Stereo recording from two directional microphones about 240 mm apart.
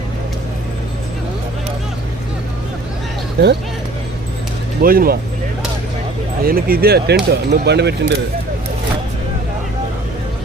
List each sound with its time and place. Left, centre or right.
3.4 s speech: right
4.8 s speech: right
6.4 s speech: right